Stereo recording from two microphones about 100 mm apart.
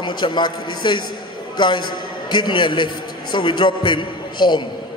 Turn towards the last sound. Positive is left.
turn(degrees=50)  # may be behind; listen again after turning